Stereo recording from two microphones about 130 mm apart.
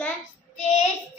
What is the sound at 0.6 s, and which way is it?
Child singing, 65° left (ahead or behind).